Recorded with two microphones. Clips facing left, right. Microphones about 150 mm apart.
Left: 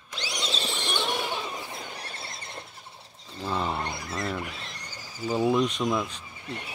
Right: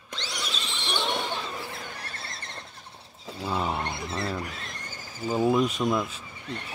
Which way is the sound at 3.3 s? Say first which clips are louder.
Right 1 dB; 5° right (ahead or behind).